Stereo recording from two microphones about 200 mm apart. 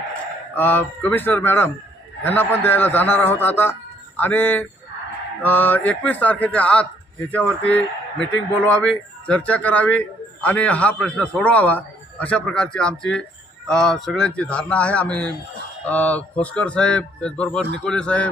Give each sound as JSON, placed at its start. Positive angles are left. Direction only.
{"t": 0.5, "sound": "a man's voice", "side_deg": 10}